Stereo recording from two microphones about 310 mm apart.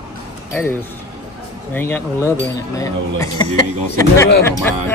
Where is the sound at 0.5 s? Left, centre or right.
Centre.